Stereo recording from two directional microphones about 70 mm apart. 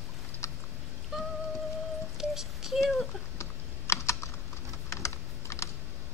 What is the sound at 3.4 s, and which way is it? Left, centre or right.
Computer keyboard, left.